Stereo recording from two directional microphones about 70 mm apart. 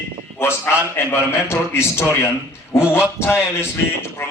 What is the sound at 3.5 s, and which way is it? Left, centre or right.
Speech, left.